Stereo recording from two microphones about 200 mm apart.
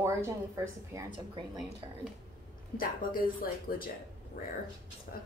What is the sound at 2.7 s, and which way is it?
Speech, 45° left (ahead or behind).